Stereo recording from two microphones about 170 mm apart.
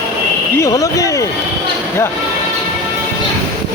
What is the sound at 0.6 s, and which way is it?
Speech, 20° left (ahead or behind).